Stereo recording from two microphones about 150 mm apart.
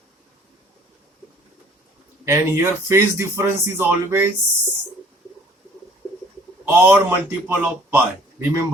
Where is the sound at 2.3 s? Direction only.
15° right (ahead or behind).